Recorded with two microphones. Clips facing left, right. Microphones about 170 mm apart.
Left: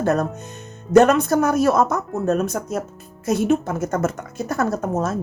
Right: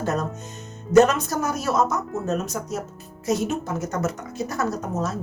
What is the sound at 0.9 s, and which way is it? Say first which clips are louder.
A woman's voice: left 3 dB; 60° left (ahead or behind).